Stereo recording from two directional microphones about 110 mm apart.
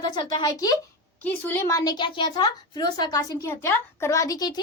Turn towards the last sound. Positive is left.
turn(degrees=35)  # may be behind; listen again after turning